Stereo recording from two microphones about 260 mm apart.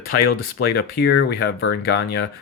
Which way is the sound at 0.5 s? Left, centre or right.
Left.